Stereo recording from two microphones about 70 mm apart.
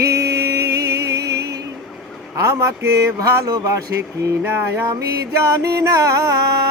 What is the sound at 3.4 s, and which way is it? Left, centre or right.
Speech, right.